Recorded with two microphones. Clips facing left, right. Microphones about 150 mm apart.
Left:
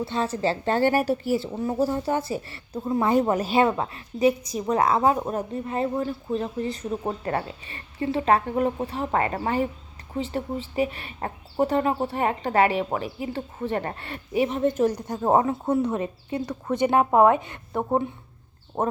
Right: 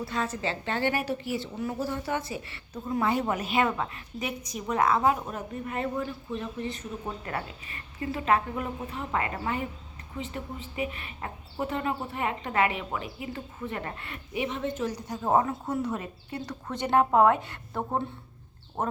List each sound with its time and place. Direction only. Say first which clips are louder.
0.0 s speech: left 6 dB; 30° left (ahead or behind)
1.5 s speech: left 7 dB; 30° left (ahead or behind)
10.8 s speech: left 6 dB; 35° left (ahead or behind); by 15.3 s 50° left (ahead or behind)
15.3 s a woman's voice: left 4 dB; 30° left (ahead or behind); by 18.0 s 15° left (ahead or behind)
18.8 s speech: left 5 dB; 35° left (ahead or behind)